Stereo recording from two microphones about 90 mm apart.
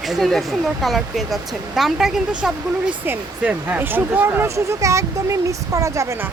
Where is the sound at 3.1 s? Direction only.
20° right (ahead or behind).